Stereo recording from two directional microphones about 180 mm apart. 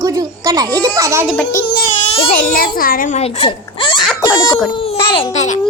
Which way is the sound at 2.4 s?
55° left (ahead or behind).